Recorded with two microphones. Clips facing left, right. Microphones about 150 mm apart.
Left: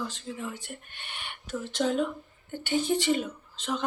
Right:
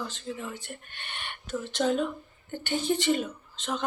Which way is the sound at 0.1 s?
10° left (ahead or behind).